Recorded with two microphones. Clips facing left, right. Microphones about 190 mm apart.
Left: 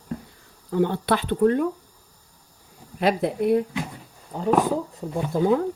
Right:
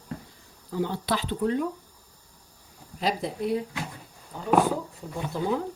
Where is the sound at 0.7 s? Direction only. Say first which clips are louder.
Left 6 dB; 55° left (ahead or behind).